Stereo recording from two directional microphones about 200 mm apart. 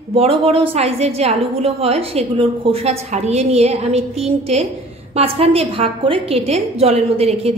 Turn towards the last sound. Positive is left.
turn(degrees=-30)  # may be behind; listen again after turning